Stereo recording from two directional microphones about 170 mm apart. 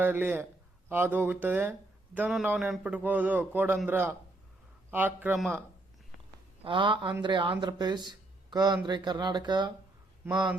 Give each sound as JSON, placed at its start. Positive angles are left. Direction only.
{"t": 0.0, "sound": "a man's voice", "side_deg": -10}
{"t": 5.4, "sound": "speech", "side_deg": 0}
{"t": 6.7, "sound": "speech", "side_deg": -30}